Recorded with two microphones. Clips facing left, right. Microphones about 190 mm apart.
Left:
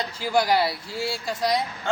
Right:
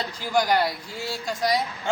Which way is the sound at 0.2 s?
5° left (ahead or behind).